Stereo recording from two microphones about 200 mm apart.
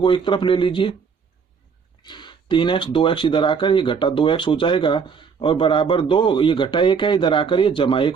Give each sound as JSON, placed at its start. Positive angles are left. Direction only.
{"t": 0.0, "sound": "speech", "side_deg": 25}
{"t": 2.0, "sound": "speech", "side_deg": 25}